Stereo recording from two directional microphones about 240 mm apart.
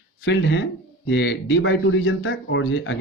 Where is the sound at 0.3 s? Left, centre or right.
Left.